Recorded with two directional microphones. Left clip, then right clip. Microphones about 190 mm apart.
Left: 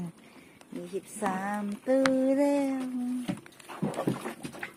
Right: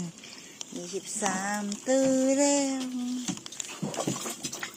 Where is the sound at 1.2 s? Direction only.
5° left (ahead or behind).